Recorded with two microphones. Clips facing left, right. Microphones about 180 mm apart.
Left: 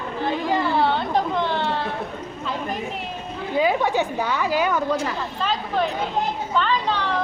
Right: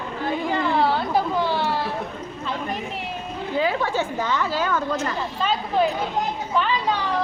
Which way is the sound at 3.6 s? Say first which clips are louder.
Left 3 dB; 15° left (ahead or behind).